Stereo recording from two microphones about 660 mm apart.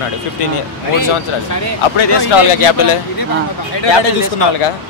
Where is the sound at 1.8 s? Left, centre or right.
Left.